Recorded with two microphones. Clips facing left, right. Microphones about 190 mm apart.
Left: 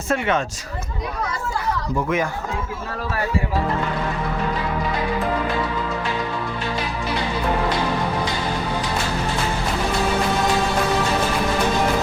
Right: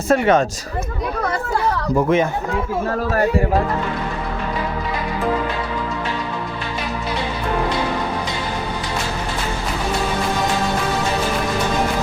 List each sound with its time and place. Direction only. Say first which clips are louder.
0.1 s speech: right 6 dB; 40° right (ahead or behind)
1.2 s speech: right 6 dB; 60° right (ahead or behind)